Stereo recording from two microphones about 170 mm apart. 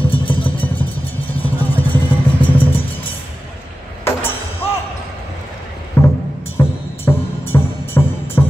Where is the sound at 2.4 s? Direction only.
30° left (ahead or behind).